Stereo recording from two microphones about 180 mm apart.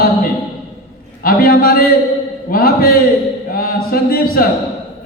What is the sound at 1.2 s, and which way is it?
A man's voice, 55° left (ahead or behind).